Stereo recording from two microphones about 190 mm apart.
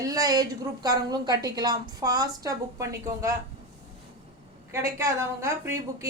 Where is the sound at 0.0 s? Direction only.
20° right (ahead or behind).